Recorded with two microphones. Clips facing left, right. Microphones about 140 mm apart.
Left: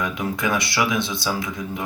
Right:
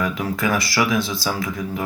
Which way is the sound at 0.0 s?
20° left (ahead or behind).